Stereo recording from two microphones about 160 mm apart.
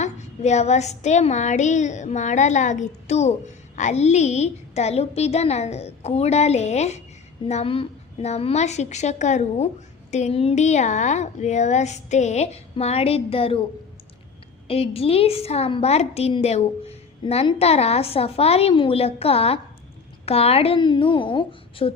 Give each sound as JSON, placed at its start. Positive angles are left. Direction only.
{"t": 0.0, "sound": "speech", "side_deg": 45}
{"t": 14.7, "sound": "a woman's voice", "side_deg": 35}